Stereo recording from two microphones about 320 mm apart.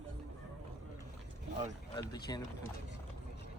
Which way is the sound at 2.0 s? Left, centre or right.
Centre.